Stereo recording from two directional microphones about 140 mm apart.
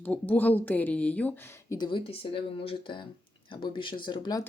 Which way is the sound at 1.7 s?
35° left (ahead or behind).